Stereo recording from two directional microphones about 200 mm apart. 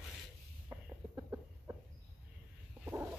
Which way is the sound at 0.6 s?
15° right (ahead or behind).